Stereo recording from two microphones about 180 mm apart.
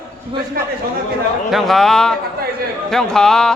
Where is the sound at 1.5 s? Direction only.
Centre (ahead or behind).